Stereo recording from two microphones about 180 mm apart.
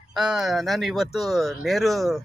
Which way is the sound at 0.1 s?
Centre (ahead or behind).